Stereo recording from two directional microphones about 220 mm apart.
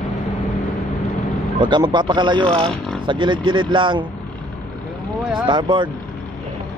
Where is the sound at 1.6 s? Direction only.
20° right (ahead or behind).